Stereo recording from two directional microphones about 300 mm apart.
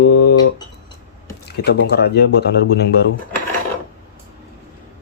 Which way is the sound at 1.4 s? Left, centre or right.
Left.